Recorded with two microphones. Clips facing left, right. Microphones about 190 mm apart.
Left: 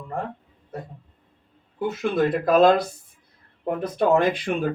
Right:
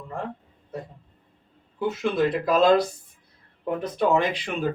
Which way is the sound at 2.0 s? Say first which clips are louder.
Left 2 dB; 50° left (ahead or behind).